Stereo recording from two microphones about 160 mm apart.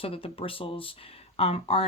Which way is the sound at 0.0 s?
35° left (ahead or behind).